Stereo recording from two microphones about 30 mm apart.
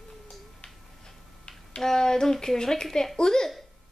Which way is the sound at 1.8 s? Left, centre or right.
Centre.